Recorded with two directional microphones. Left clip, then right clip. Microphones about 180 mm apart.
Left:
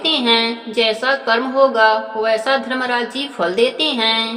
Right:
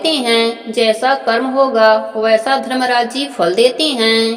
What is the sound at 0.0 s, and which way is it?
Speech, 35° right (ahead or behind).